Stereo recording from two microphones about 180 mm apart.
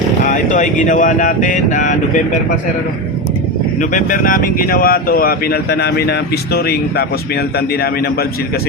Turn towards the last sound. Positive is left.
turn(degrees=60)  # may be behind; listen again after turning